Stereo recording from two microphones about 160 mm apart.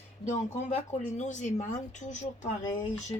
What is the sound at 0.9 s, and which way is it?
Speech, 50° left (ahead or behind).